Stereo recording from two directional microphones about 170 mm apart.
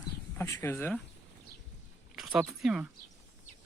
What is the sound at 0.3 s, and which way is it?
Speech, 15° left (ahead or behind).